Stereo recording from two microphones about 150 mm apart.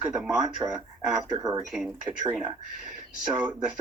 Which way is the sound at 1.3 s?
25° right (ahead or behind).